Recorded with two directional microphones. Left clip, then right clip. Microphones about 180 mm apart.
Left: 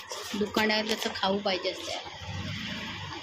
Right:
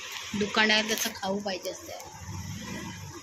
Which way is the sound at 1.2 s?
20° left (ahead or behind).